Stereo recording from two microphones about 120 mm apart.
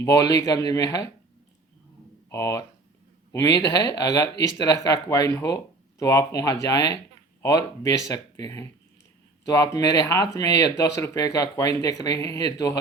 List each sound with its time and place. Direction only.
0.0 s speech: 25° left (ahead or behind)
2.3 s speech: 25° left (ahead or behind)